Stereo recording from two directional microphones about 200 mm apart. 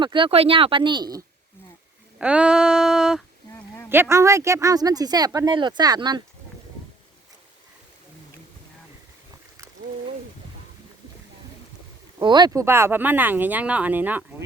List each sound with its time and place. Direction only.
0.0 s speech: 25° right (ahead or behind)
2.1 s a sound: 5° right (ahead or behind)
3.8 s speech: 10° right (ahead or behind)
12.2 s speech: 20° right (ahead or behind)